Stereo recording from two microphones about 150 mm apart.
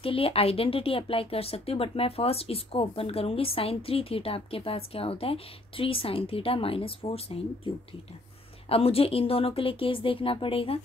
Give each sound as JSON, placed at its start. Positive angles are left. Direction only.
{"t": 0.0, "sound": "speech", "side_deg": 40}